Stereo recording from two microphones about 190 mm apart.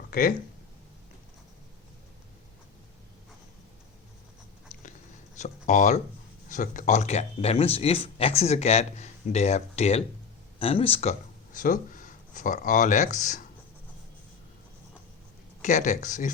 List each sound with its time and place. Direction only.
0.1 s speech: 50° left (ahead or behind)
5.4 s speech: 40° left (ahead or behind)
15.6 s speech: 40° left (ahead or behind)